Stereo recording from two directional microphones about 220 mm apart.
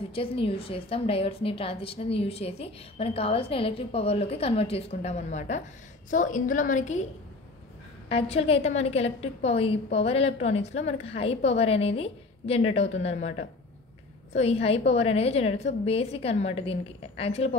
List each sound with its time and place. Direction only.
0.1 s a woman's voice: 25° left (ahead or behind)
8.1 s a woman's voice: 25° left (ahead or behind)